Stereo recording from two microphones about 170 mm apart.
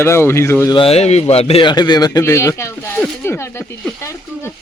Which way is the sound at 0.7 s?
35° left (ahead or behind).